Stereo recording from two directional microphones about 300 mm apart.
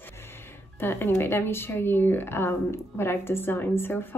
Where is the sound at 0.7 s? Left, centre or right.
Centre.